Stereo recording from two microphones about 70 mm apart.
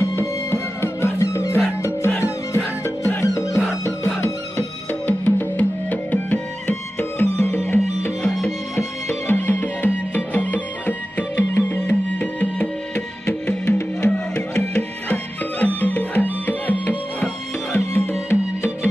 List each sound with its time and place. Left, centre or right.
0.0 s music: left
9.3 s music: left
13.7 s music: left
14.5 s music: centre
17.7 s music: left